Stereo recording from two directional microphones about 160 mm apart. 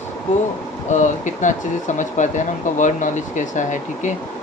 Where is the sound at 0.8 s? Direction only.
50° left (ahead or behind).